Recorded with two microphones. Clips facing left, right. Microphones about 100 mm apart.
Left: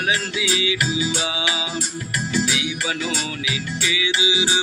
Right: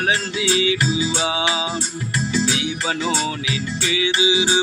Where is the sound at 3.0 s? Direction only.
40° right (ahead or behind).